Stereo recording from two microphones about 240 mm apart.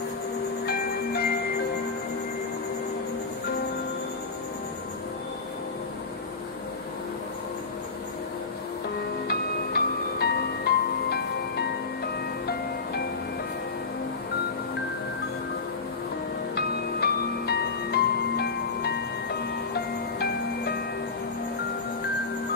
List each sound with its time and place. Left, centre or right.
0.7 s music: left
9.3 s music: left
16.5 s music: left